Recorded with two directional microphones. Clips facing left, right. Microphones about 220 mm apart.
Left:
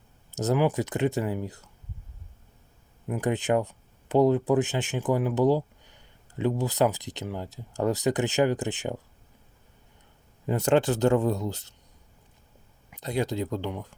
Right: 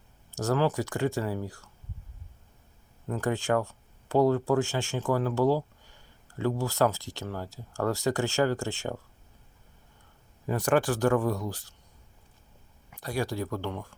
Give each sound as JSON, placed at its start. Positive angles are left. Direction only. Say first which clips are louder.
{"t": 0.3, "sound": "speech", "louder": "left 2 dB", "side_deg": 20}
{"t": 3.1, "sound": "speech", "louder": "left 2 dB", "side_deg": 20}
{"t": 10.4, "sound": "speech", "louder": "left 3 dB", "side_deg": 25}
{"t": 12.9, "sound": "speech", "louder": "left 3 dB", "side_deg": 20}